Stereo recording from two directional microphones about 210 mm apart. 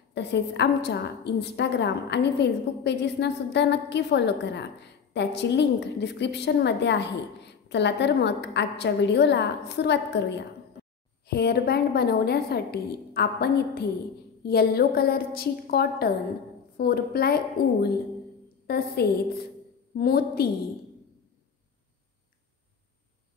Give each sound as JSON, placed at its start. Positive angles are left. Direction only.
{"t": 0.1, "sound": "a woman's voice", "side_deg": 55}